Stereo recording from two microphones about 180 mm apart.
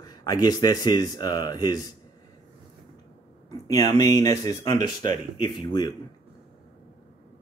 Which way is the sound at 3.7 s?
20° left (ahead or behind).